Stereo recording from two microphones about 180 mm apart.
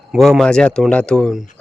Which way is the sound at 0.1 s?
Centre (ahead or behind).